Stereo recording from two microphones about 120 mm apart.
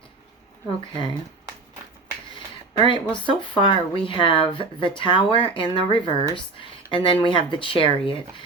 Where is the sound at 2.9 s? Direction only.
45° left (ahead or behind).